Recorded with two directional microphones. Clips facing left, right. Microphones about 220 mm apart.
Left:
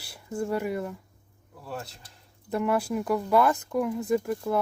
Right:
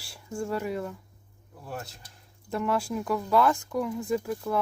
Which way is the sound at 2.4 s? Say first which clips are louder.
Left 2 dB; 5° left (ahead or behind).